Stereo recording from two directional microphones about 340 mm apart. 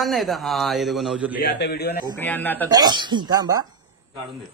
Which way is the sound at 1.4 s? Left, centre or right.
Left.